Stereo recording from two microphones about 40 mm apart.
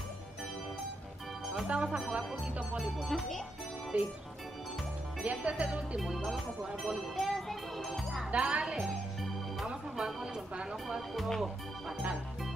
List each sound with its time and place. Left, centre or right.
1.7 s speech: right
2.8 s speech: centre
3.9 s music: right
5.2 s music: right
7.0 s music: centre
8.3 s speech: right
8.7 s music: centre
9.9 s speech: centre
11.1 s speech: centre